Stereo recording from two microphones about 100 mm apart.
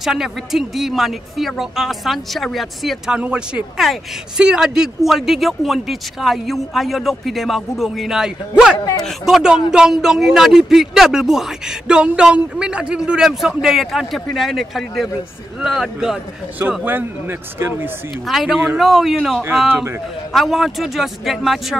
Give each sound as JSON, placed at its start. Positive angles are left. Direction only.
{"t": 0.0, "sound": "speech", "side_deg": -5}
{"t": 3.2, "sound": "speech", "side_deg": -10}
{"t": 8.7, "sound": "speech", "side_deg": 40}
{"t": 9.0, "sound": "speech", "side_deg": -5}
{"t": 16.8, "sound": "a man's voice", "side_deg": -20}
{"t": 18.2, "sound": "speech", "side_deg": 0}